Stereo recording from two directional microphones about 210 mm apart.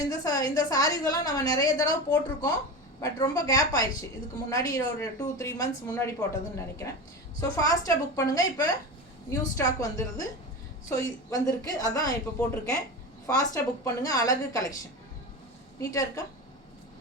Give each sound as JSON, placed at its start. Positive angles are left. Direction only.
{"t": 0.1, "sound": "a woman's voice", "side_deg": 15}
{"t": 7.3, "sound": "a woman's voice", "side_deg": 15}
{"t": 15.8, "sound": "a woman's voice", "side_deg": 15}